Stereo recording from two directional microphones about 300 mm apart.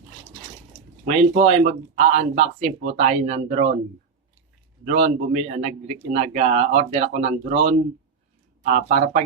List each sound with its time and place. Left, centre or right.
1.0 s speech: right
4.9 s speech: right